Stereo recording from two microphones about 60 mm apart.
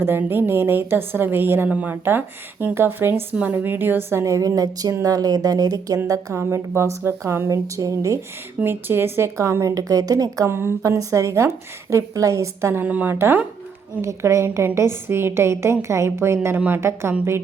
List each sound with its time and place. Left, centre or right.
0.0 s a woman's voice: right
1.7 s a woman's voice: right
2.0 s a woman's voice: right
4.2 s a woman's voice: right
6.3 s a woman's voice: right
7.5 s a woman's voice: right
8.6 s a woman's voice: right
9.7 s speech: right
10.5 s a woman's voice: right
10.8 s a woman's voice: right
12.7 s a woman's voice: right
13.1 s a woman's voice: right
14.0 s a woman's voice: right